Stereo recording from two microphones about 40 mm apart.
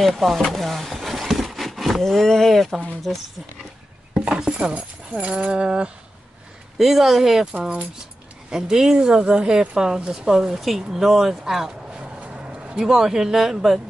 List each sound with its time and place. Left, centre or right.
0.0 s speech: centre
0.9 s a sound: centre
2.2 s speech: centre
3.1 s speech: centre
4.1 s chopping: right
4.7 s speech: right
6.8 s speech: centre
8.0 s speech: centre
12.2 s speech: right; by 13.7 s centre